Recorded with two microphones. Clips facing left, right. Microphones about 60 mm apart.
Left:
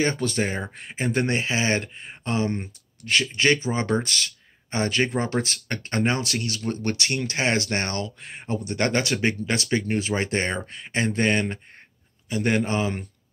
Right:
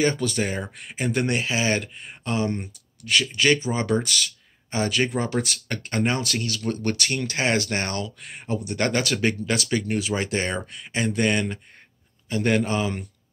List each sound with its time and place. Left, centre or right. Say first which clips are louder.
0.0 s speech: right 1 dB; left
12.3 s speech: right 1 dB; centre